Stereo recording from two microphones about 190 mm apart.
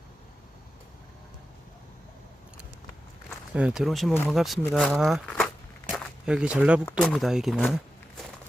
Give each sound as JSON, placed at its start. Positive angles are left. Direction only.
{"t": 3.2, "sound": "speech", "side_deg": -5}